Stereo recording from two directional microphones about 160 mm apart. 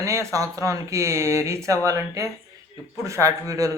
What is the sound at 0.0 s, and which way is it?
Speech, 15° right (ahead or behind).